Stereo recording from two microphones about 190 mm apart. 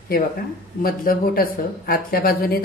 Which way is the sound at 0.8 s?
50° left (ahead or behind).